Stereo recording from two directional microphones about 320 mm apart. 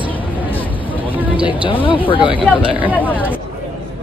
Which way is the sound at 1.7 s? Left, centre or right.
Centre.